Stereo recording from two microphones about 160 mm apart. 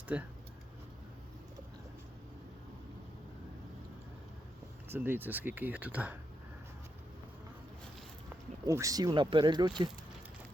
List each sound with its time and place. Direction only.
0.1 s speech: 10° right (ahead or behind)
4.9 s speech: 15° right (ahead or behind)
8.6 s speech: 20° right (ahead or behind)